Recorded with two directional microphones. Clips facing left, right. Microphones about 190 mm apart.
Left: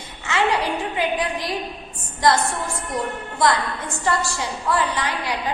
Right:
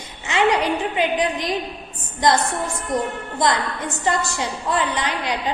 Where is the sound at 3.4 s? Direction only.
20° right (ahead or behind).